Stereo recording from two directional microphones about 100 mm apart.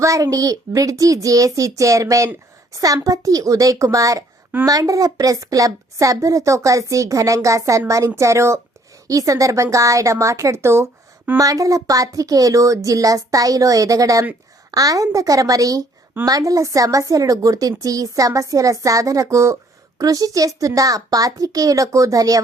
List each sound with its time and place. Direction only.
0.0 s a woman's voice: 35° right (ahead or behind)